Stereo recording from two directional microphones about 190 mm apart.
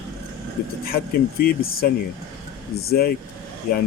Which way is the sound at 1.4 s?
50° left (ahead or behind).